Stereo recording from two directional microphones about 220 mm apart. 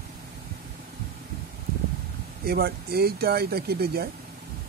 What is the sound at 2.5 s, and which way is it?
Speech, 45° right (ahead or behind).